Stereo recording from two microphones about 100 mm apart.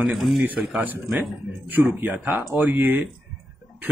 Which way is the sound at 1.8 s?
20° right (ahead or behind).